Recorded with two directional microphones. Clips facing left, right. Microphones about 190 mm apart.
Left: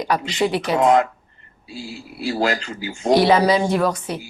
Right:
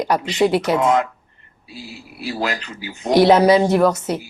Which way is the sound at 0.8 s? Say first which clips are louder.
Left 2 dB; 35° left (ahead or behind).